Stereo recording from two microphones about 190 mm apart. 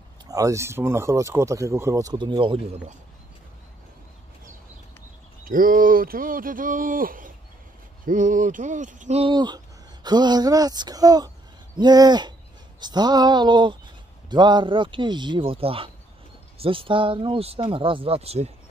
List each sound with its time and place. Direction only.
0.3 s speech: 15° right (ahead or behind)
5.4 s speech: 45° right (ahead or behind)